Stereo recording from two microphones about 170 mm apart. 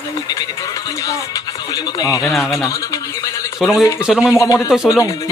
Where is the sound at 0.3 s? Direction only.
20° left (ahead or behind).